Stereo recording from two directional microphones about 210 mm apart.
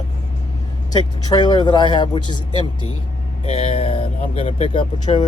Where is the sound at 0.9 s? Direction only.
20° left (ahead or behind).